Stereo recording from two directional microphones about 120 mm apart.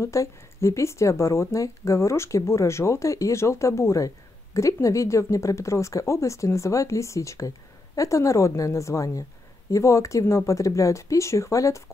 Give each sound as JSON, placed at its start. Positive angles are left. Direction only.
{"t": 0.0, "sound": "speech", "side_deg": 25}